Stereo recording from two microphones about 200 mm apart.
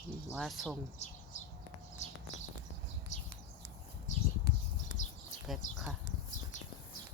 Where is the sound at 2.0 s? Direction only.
35° left (ahead or behind).